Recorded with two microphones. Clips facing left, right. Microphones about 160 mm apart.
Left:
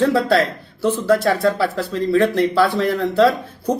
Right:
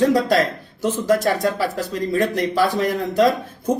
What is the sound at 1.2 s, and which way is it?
Speech, 15° right (ahead or behind).